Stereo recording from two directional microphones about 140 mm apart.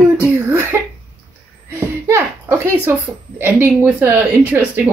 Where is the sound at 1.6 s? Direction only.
20° right (ahead or behind).